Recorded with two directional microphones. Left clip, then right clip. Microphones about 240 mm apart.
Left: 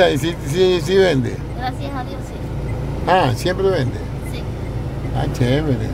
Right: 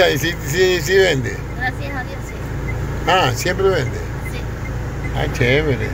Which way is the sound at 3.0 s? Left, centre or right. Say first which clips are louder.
Even; left.